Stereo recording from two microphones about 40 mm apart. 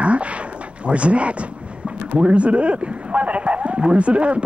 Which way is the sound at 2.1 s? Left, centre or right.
Right.